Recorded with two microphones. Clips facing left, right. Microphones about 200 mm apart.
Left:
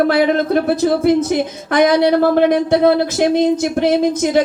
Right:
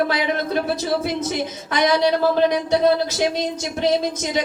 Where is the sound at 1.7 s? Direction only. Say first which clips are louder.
Left 6 dB; 55° left (ahead or behind).